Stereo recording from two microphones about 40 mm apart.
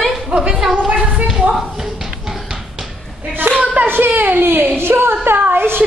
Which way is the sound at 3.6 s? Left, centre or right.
Right.